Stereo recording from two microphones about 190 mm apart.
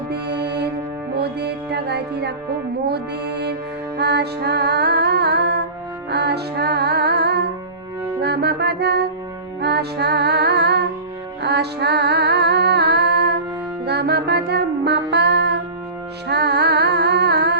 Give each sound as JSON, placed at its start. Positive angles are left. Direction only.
{"t": 0.1, "sound": "music", "side_deg": -60}
{"t": 16.3, "sound": "humming", "side_deg": -60}